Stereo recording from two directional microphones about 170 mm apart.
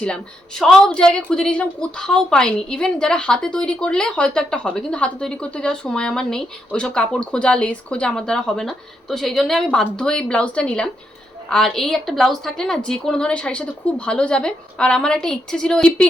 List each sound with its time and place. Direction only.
0.6 s a woman's voice: 5° left (ahead or behind)